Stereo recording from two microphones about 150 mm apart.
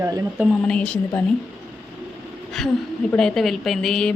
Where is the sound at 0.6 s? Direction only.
5° left (ahead or behind).